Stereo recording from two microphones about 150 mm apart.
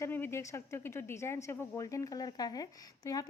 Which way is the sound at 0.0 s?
15° left (ahead or behind).